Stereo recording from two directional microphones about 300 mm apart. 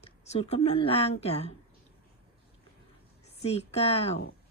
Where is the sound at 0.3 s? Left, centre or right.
Left.